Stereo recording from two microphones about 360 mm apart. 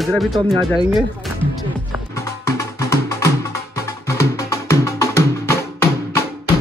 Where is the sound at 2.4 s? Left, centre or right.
Centre.